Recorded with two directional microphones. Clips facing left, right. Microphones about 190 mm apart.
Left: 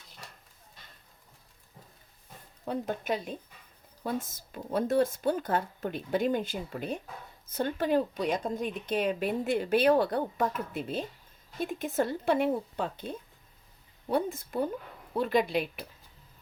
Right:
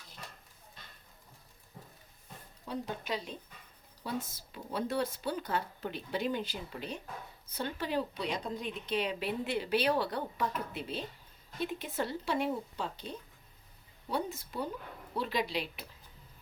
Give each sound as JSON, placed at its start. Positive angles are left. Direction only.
{"t": 2.6, "sound": "speech", "side_deg": 50}